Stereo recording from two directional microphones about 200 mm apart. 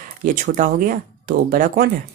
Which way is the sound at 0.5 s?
45° right (ahead or behind).